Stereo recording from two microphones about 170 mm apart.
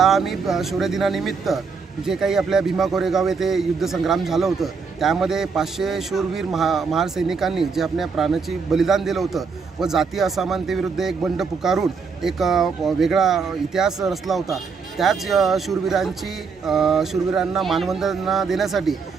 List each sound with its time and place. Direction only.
0.0 s a man's voice: centre (ahead or behind)